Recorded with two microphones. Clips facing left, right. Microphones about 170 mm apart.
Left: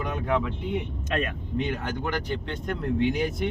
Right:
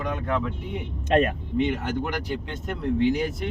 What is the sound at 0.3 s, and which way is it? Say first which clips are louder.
Speech: left 2 dB; 10° left (ahead or behind).